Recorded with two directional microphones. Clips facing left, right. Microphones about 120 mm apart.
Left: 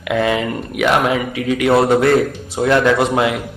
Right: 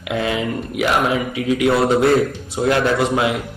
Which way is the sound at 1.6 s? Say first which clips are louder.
Left 3 dB; 55° left (ahead or behind).